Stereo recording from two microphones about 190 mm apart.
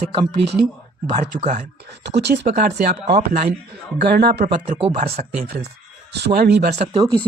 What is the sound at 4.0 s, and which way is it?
Speech, 55° right (ahead or behind).